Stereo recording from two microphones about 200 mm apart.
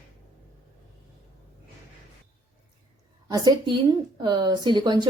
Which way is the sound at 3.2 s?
20° right (ahead or behind).